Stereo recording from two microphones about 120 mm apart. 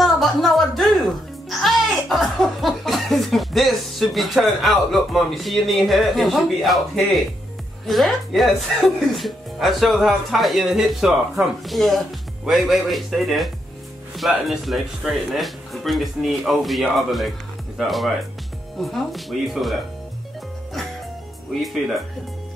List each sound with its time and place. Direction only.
0.0 s music: centre (ahead or behind)
7.8 s speech: centre (ahead or behind)